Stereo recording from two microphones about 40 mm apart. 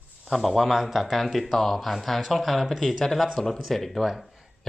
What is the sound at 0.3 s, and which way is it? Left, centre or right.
Speech, centre.